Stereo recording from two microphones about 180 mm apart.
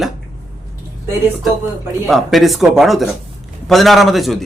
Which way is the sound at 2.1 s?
Centre (ahead or behind).